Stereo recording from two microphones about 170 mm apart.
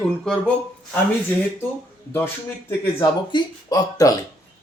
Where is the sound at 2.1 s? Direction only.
15° left (ahead or behind).